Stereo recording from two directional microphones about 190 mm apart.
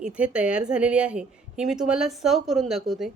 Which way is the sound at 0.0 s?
5° right (ahead or behind).